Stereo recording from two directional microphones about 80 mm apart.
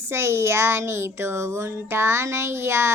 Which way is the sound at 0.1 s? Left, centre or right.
Right.